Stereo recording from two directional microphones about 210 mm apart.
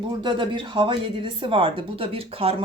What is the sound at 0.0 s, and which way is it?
Speech, 20° right (ahead or behind).